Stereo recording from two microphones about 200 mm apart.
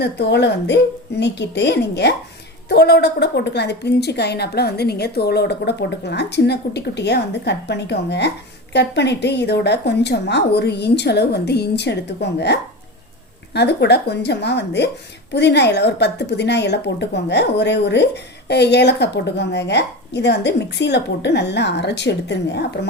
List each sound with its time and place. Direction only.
0.0 s a woman's voice: 55° left (ahead or behind)